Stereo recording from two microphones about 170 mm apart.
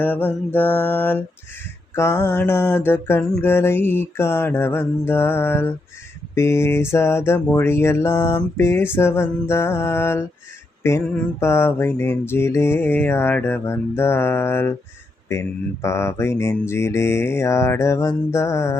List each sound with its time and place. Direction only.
0.0 s mantra: 10° left (ahead or behind)